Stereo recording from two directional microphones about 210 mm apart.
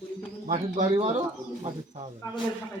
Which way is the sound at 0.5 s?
30° right (ahead or behind).